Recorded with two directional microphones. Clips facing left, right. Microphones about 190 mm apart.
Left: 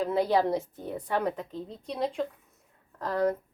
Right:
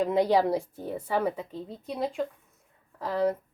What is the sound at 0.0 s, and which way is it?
A woman's voice, 15° right (ahead or behind).